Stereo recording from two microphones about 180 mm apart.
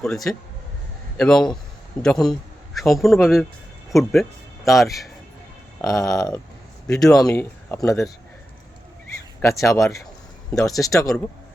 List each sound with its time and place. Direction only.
0.0 s a man's voice: centre (ahead or behind)
5.8 s speech: 20° left (ahead or behind)
6.8 s speech: 5° left (ahead or behind)
9.4 s speech: 15° left (ahead or behind)